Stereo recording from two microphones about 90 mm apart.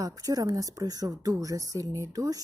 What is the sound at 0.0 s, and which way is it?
Speech, 40° right (ahead or behind).